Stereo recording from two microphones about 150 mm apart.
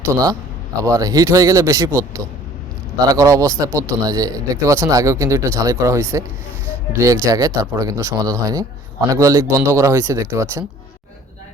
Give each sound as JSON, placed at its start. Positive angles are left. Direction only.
{"t": 0.0, "sound": "speech", "side_deg": -20}